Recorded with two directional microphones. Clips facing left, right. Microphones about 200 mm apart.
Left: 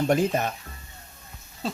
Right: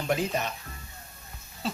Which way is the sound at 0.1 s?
50° left (ahead or behind).